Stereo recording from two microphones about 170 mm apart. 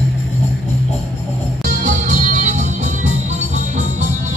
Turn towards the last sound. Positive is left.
turn(degrees=-45)  # may be behind; listen again after turning